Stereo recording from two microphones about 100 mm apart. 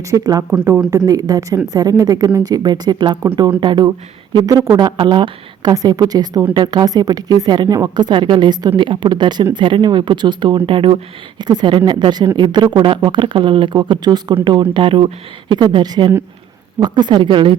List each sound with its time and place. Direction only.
0.0 s speech: 35° right (ahead or behind)
4.4 s speech: 35° right (ahead or behind)
4.8 s speech: 50° right (ahead or behind)
5.7 s speech: 40° right (ahead or behind); by 11.4 s 60° right (ahead or behind)
11.4 s speech: 45° right (ahead or behind)
12.8 s speech: 55° right (ahead or behind)
15.5 s speech: 50° right (ahead or behind)